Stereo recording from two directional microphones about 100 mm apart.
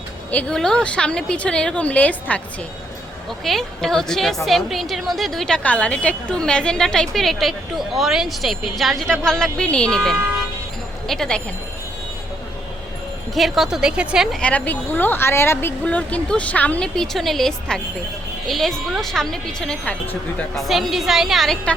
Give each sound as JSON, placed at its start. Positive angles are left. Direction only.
{"t": 0.3, "sound": "a woman's voice", "side_deg": 15}
{"t": 3.2, "sound": "a woman's voice", "side_deg": 0}
{"t": 13.3, "sound": "a woman's voice", "side_deg": 0}
{"t": 14.3, "sound": "a woman's voice", "side_deg": 15}
{"t": 20.6, "sound": "a woman's voice", "side_deg": 0}